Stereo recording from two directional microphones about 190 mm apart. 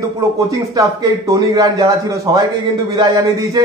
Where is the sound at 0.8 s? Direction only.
20° right (ahead or behind).